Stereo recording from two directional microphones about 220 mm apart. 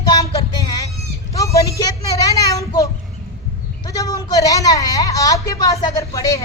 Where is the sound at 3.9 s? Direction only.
15° left (ahead or behind).